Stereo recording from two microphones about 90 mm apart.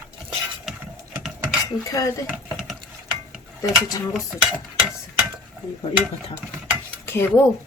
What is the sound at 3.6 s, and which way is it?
Speech, 45° left (ahead or behind).